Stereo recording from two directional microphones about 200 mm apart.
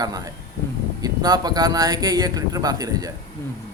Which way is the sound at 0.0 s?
20° right (ahead or behind).